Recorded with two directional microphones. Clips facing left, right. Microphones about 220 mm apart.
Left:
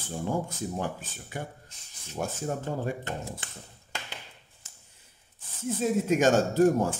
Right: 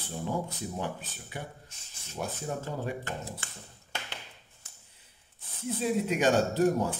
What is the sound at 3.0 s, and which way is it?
Speech, 20° left (ahead or behind).